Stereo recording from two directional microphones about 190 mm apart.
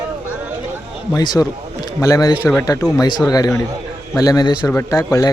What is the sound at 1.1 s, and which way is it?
Speech, 20° left (ahead or behind).